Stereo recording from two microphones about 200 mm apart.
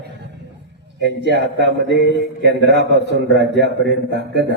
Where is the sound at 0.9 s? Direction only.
60° right (ahead or behind).